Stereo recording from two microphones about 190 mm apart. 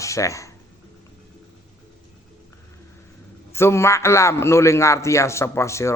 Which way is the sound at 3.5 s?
15° left (ahead or behind).